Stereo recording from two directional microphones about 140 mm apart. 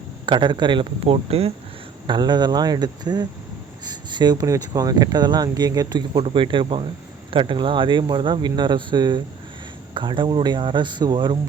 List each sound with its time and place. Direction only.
0.3 s speech: 35° right (ahead or behind)
2.0 s speech: 30° right (ahead or behind)